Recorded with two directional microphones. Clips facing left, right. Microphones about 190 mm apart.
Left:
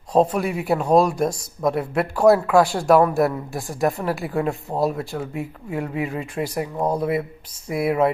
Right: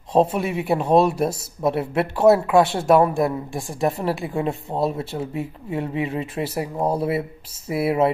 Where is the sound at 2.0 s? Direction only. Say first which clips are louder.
Even; centre (ahead or behind).